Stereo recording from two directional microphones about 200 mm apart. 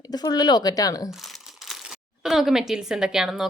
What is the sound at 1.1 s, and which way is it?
Speech, centre (ahead or behind).